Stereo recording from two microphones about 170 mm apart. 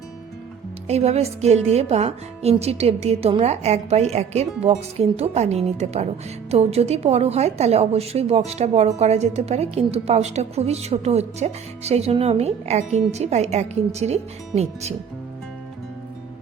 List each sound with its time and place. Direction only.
0.9 s a woman's voice: 40° right (ahead or behind)